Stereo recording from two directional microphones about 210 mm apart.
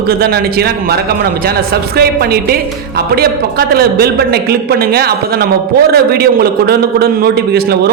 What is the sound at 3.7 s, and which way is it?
A man's voice, 45° right (ahead or behind).